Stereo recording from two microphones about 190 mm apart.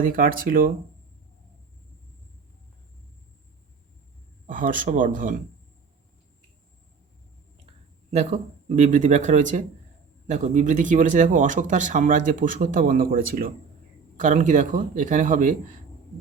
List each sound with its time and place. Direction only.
0.0 s speech: 45° right (ahead or behind)
4.4 s speech: 45° right (ahead or behind)
8.1 s speech: 40° right (ahead or behind)